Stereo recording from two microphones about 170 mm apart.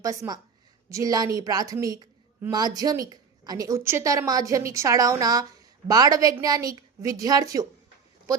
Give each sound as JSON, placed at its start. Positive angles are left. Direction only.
{"t": 0.0, "sound": "a woman's voice", "side_deg": -20}